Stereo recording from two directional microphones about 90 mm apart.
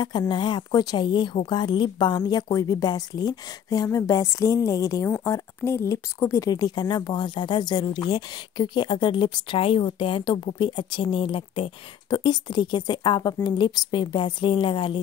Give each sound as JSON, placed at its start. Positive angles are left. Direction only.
{"t": 0.3, "sound": "speech", "side_deg": 55}
{"t": 5.2, "sound": "speech", "side_deg": 30}